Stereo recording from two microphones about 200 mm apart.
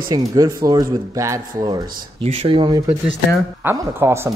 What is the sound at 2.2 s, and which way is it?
Speech, 30° right (ahead or behind).